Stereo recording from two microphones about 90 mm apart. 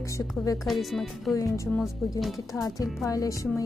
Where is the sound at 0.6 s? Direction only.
Centre (ahead or behind).